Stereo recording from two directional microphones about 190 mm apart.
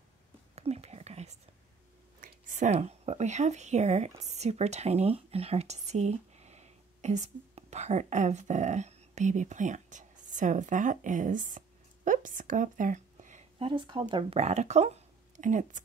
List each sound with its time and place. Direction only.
0.6 s whispering: 35° right (ahead or behind)
2.2 s speech: 40° right (ahead or behind)